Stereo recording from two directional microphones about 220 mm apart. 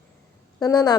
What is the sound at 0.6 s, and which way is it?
Speech, 20° left (ahead or behind).